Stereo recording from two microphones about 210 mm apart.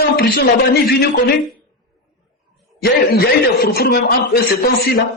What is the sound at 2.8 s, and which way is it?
A man's voice, 45° left (ahead or behind).